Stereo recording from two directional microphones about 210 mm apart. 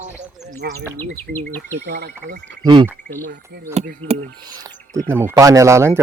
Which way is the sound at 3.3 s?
50° right (ahead or behind).